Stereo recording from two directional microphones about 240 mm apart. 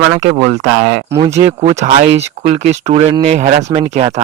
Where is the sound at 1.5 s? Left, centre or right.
Right.